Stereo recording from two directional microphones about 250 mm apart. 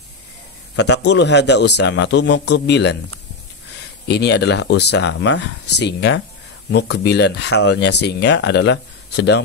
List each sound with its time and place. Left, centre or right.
0.7 s speech: left
4.1 s speech: left